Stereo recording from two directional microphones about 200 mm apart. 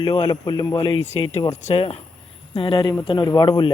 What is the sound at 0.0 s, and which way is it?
Speech, 25° left (ahead or behind).